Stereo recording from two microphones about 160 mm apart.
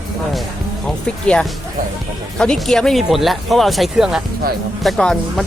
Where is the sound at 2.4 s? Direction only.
5° left (ahead or behind).